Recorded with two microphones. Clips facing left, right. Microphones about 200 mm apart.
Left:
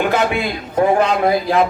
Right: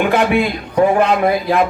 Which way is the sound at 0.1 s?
55° right (ahead or behind).